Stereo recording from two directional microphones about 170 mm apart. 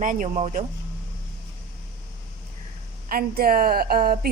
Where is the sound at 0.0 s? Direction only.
50° right (ahead or behind).